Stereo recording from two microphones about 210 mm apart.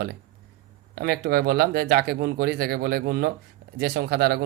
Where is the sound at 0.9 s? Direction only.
50° right (ahead or behind).